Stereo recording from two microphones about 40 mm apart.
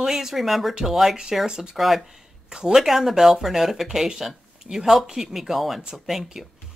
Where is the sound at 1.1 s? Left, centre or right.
Centre.